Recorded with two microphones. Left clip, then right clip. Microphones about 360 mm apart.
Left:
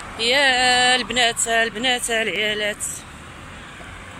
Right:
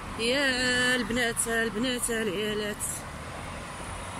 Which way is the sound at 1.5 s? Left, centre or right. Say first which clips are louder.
Left 9 dB; left.